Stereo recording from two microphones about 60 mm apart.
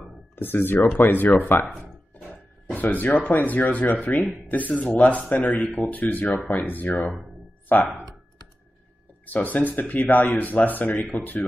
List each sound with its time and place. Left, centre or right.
0.4 s speech: left
2.7 s speech: left
9.2 s speech: left